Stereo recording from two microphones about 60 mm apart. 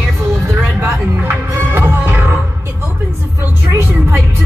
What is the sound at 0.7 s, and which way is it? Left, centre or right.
Music, right.